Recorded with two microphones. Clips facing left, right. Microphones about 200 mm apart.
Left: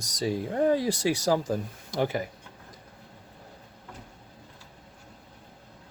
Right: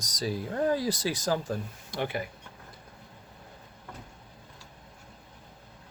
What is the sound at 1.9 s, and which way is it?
Speech, 40° left (ahead or behind).